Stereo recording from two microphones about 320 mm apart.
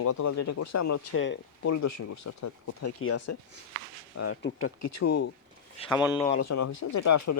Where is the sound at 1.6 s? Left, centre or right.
Left.